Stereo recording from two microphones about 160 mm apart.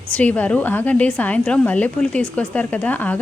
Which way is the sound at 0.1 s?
10° left (ahead or behind).